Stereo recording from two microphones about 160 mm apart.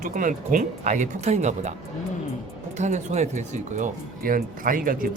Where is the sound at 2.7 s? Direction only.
45° right (ahead or behind).